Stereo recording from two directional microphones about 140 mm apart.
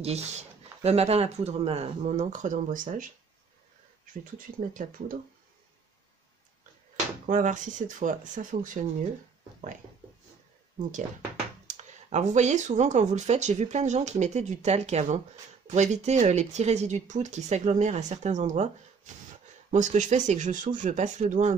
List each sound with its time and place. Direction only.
0.0 s speech: 50° right (ahead or behind); by 3.1 s 70° right (ahead or behind)
4.4 s speech: 75° right (ahead or behind)
7.2 s speech: 65° right (ahead or behind)
11.6 s speech: 60° right (ahead or behind)